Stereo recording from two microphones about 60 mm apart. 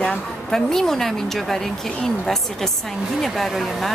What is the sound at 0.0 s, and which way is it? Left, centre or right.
A woman's voice, centre.